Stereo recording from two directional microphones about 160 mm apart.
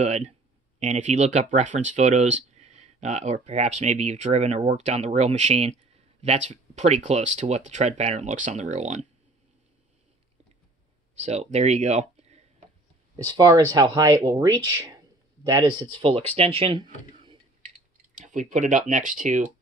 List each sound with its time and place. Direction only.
0.0 s speech: 45° right (ahead or behind)
11.1 s speech: 45° right (ahead or behind)
13.1 s speech: 25° right (ahead or behind)
18.1 s speech: 50° right (ahead or behind)